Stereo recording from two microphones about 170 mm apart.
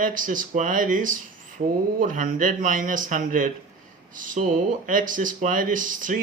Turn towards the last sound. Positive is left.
turn(degrees=-50)  # may be behind; listen again after turning